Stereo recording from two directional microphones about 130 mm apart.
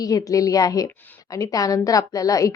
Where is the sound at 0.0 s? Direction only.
25° left (ahead or behind).